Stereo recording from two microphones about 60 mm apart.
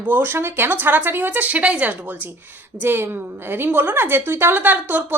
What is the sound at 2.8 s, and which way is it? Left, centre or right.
Speech, right.